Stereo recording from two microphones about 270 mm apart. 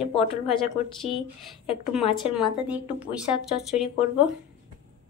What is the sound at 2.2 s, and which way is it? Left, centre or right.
Speech, centre.